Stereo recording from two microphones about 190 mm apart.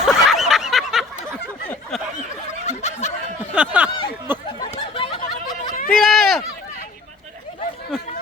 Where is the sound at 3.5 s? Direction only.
5° right (ahead or behind).